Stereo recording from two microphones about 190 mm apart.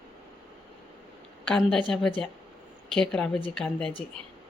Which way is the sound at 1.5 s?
5° left (ahead or behind).